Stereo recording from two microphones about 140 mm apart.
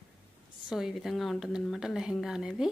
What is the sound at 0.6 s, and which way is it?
A woman's voice, 5° right (ahead or behind).